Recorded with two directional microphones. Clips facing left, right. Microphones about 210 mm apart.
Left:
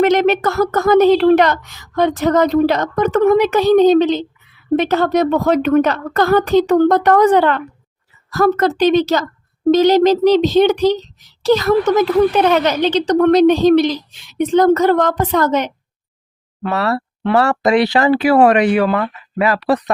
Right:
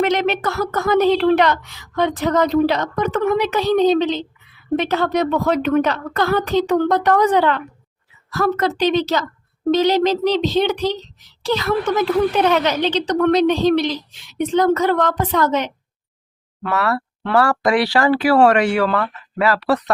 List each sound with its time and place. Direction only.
0.0 s a woman's voice: 45° left (ahead or behind)
16.6 s speech: 25° left (ahead or behind)